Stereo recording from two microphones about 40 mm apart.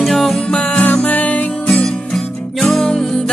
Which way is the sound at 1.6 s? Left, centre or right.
Centre.